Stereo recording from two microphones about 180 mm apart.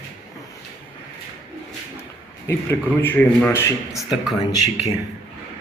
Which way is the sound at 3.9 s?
Centre (ahead or behind).